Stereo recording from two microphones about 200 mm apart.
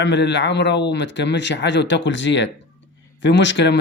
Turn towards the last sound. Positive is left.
turn(degrees=60)  # may be behind; listen again after turning